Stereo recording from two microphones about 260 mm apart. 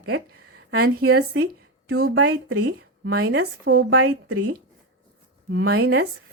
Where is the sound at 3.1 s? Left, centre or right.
Right.